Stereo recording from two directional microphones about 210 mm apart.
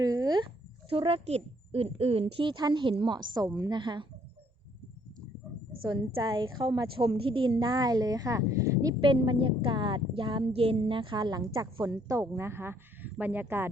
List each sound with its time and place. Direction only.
0.0 s a woman's voice: 15° right (ahead or behind)
5.8 s a woman's voice: 20° right (ahead or behind)